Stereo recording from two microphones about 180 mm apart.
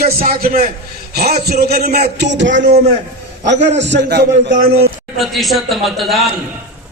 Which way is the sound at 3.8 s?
75° right (ahead or behind).